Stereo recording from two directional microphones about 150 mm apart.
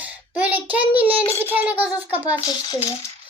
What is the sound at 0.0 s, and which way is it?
Child singing, 10° right (ahead or behind).